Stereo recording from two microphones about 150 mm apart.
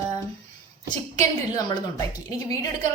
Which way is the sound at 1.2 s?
25° left (ahead or behind).